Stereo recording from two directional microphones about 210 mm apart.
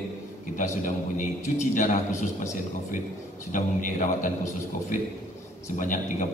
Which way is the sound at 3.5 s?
40° left (ahead or behind).